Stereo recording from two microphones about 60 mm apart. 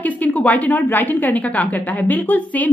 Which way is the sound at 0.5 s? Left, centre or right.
Left.